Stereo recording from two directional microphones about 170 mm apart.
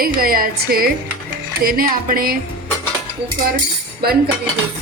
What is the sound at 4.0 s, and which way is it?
Cutlery, 65° right (ahead or behind).